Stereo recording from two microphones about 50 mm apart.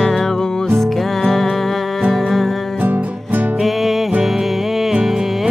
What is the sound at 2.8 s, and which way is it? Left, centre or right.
Music, right.